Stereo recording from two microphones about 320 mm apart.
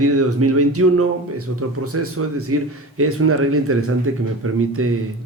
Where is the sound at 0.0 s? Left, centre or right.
Right.